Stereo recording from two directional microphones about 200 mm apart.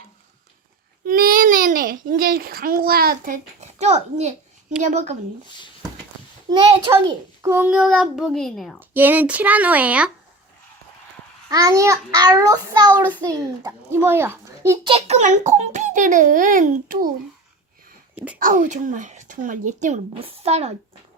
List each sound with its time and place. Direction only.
1.0 s a child's voice: 45° right (ahead or behind)
6.5 s a child's voice: 20° right (ahead or behind); by 8.8 s centre (ahead or behind)
8.8 s a child's voice: 10° right (ahead or behind)
11.4 s a child's voice: 15° right (ahead or behind)
14.8 s a child's voice: 30° right (ahead or behind)
18.1 s a sound: 10° right (ahead or behind)
18.3 s a child's voice: 45° right (ahead or behind)